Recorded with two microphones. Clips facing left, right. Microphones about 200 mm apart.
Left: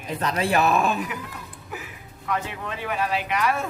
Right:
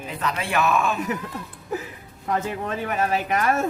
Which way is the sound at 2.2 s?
40° right (ahead or behind).